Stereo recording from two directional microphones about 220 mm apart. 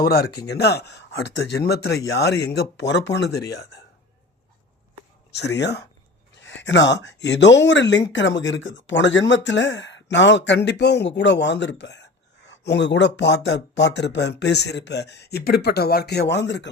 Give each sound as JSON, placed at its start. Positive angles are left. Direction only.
{"t": 0.0, "sound": "speech", "side_deg": 45}
{"t": 5.5, "sound": "speech", "side_deg": 50}